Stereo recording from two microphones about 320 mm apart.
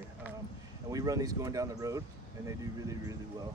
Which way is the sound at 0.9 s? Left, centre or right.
Centre.